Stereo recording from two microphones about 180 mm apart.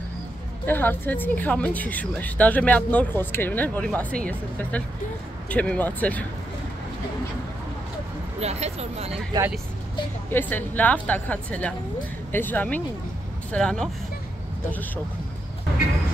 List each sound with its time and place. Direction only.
0.7 s speech: 10° left (ahead or behind)
8.4 s speech: 35° right (ahead or behind)
10.3 s speech: 10° left (ahead or behind)